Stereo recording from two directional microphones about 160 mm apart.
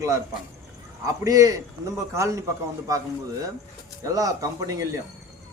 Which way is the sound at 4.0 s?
20° right (ahead or behind).